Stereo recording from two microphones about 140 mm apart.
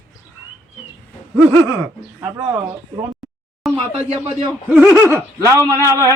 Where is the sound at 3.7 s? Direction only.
45° right (ahead or behind).